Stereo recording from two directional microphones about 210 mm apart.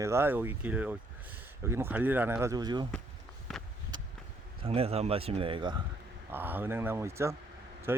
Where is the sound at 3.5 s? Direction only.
Centre (ahead or behind).